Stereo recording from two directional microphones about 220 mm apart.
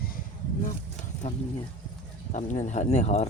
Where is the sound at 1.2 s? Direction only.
30° left (ahead or behind).